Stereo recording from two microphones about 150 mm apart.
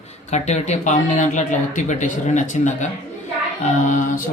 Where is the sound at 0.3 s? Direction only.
50° left (ahead or behind).